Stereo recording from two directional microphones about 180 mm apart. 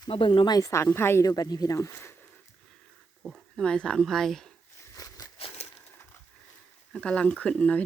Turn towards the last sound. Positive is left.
turn(degrees=5)  # may be behind; listen again after turning